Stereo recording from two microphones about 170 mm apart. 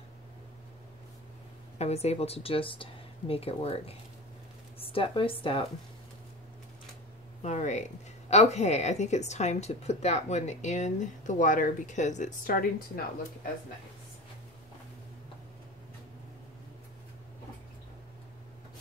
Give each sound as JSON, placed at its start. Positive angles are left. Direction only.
{"t": 1.8, "sound": "speech", "side_deg": 40}
{"t": 7.4, "sound": "speech", "side_deg": 45}